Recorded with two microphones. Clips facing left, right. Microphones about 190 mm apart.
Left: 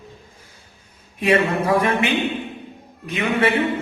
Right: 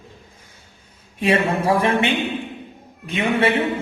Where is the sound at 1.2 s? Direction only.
30° right (ahead or behind).